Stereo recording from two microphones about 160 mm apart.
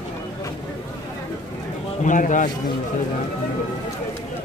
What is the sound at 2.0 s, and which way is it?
Speech, 55° left (ahead or behind).